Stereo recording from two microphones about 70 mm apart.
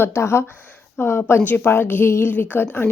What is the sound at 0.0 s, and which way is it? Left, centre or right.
A woman's voice, left.